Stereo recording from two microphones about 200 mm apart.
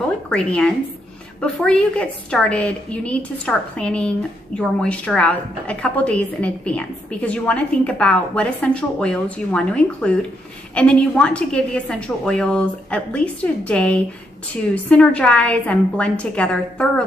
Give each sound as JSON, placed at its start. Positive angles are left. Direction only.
{"t": 0.3, "sound": "a woman's voice", "side_deg": 5}